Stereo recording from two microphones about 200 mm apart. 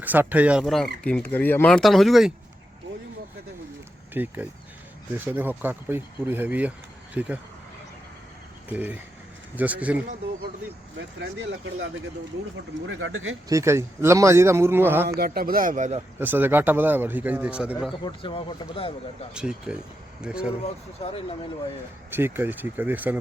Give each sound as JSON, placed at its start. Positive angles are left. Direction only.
{"t": 0.0, "sound": "speech", "side_deg": -10}
{"t": 4.1, "sound": "speech", "side_deg": -10}
{"t": 8.7, "sound": "speech", "side_deg": -10}
{"t": 11.2, "sound": "speech", "side_deg": -60}
{"t": 12.9, "sound": "speech", "side_deg": -75}
{"t": 13.5, "sound": "speech", "side_deg": -15}
{"t": 15.2, "sound": "speech", "side_deg": -45}
{"t": 16.1, "sound": "speech", "side_deg": -10}
{"t": 18.0, "sound": "speech", "side_deg": 25}
{"t": 19.3, "sound": "speech", "side_deg": -5}
{"t": 22.1, "sound": "speech", "side_deg": -10}